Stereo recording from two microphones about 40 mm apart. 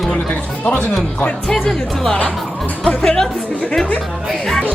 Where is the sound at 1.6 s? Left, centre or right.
Centre.